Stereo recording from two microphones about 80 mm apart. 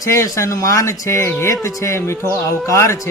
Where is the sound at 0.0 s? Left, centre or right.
Left.